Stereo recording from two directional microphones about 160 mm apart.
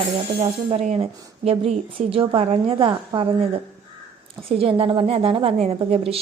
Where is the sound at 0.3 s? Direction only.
40° right (ahead or behind).